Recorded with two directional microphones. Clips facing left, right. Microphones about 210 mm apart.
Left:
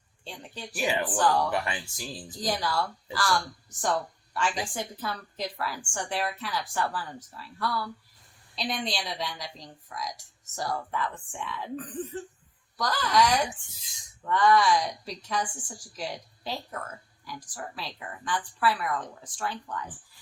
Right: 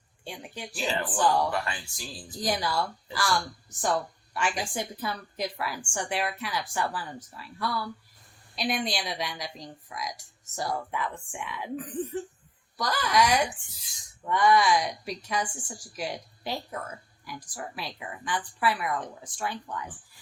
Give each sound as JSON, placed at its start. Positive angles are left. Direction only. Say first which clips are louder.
{"t": 0.3, "sound": "a woman's voice", "louder": "right 2 dB", "side_deg": -10}
{"t": 0.8, "sound": "speech", "louder": "left 2 dB", "side_deg": 15}
{"t": 1.1, "sound": "a woman's voice", "louder": "right 2 dB", "side_deg": -10}
{"t": 1.5, "sound": "speech", "louder": "left 1 dB", "side_deg": 15}
{"t": 2.4, "sound": "a woman's voice", "louder": "right 1 dB", "side_deg": -15}